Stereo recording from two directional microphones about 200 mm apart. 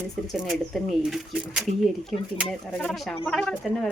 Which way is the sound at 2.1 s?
40° right (ahead or behind).